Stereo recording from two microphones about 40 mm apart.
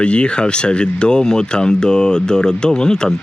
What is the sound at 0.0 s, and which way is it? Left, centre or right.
Speech, left.